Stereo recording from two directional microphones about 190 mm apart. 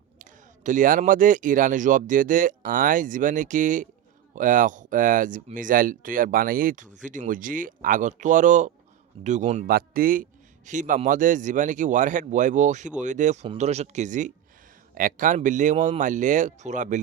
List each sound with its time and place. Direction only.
0.2 s speech: 45° right (ahead or behind)